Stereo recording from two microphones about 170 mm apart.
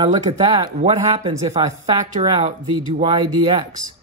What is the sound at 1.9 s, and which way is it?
Speech, 40° right (ahead or behind).